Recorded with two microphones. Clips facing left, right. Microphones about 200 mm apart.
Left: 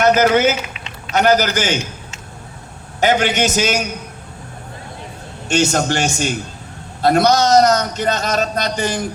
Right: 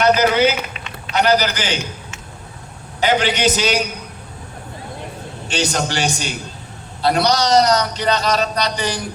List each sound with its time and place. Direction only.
0.0 s a man's voice: 50° left (ahead or behind)
5.5 s a man's voice: 45° left (ahead or behind)